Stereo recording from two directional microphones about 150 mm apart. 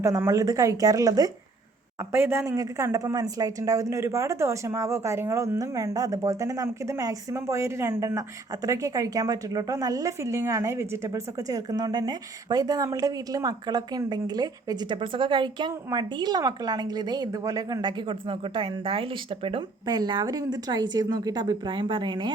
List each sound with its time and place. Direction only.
0.0 s a woman's voice: 20° right (ahead or behind)